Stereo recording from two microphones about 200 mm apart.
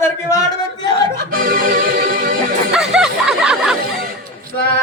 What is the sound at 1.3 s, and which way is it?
Music, 45° right (ahead or behind).